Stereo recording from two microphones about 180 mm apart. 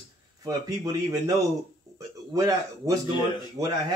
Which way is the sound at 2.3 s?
20° right (ahead or behind).